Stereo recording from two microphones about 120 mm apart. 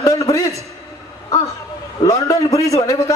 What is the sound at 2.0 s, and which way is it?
A man's voice, 30° left (ahead or behind).